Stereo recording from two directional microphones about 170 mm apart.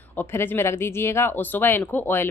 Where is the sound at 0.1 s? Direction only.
10° left (ahead or behind).